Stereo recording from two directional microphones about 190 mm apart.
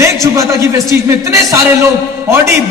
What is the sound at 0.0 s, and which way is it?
A man's voice, 15° right (ahead or behind).